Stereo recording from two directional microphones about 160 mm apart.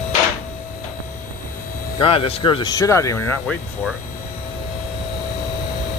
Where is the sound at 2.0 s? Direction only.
35° left (ahead or behind); by 3.3 s 20° left (ahead or behind).